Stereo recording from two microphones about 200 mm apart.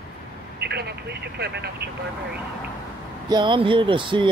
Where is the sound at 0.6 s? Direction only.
55° right (ahead or behind).